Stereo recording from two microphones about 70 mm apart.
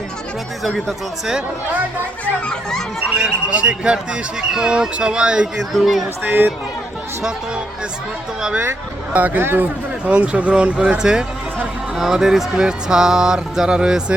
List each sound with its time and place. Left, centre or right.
2.2 s a child's voice: centre
3.1 s speech: centre
6.2 s speech: right
7.2 s speech: centre
9.1 s speech: right
10.1 s speech: centre